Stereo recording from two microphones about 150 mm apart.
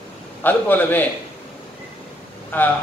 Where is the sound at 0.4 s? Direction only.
15° left (ahead or behind).